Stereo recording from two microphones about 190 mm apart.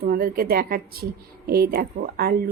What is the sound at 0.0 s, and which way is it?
Speech, 50° right (ahead or behind).